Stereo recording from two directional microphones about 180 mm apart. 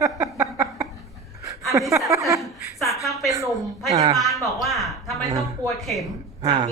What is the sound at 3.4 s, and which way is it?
A woman's voice, centre (ahead or behind).